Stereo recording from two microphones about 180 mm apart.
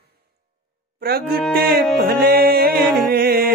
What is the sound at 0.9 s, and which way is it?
Music, 60° right (ahead or behind).